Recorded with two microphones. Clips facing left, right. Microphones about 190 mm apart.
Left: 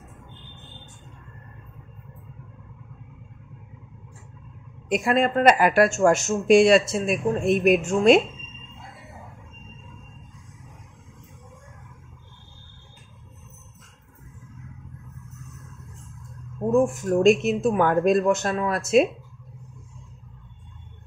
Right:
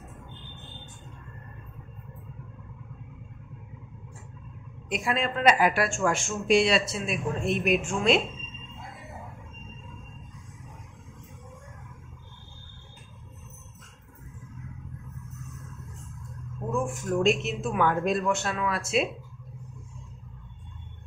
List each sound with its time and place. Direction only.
4.8 s speech: 50° left (ahead or behind)
16.7 s speech: 40° left (ahead or behind)